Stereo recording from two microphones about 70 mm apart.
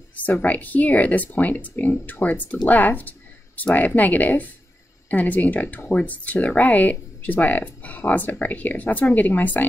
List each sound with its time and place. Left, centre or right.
0.2 s speech: left